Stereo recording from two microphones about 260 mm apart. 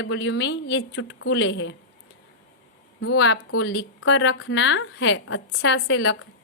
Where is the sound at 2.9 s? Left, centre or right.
Left.